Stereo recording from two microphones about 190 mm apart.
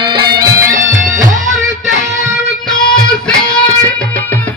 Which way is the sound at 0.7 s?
45° right (ahead or behind).